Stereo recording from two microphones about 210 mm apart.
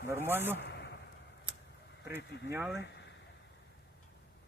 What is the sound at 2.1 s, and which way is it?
Speech, 10° right (ahead or behind).